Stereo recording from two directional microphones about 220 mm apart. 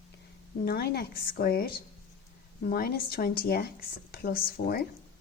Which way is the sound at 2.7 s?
40° left (ahead or behind).